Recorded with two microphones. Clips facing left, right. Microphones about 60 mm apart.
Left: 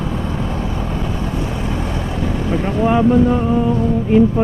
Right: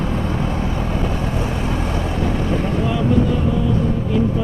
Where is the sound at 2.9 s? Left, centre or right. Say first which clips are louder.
Left 6 dB; left.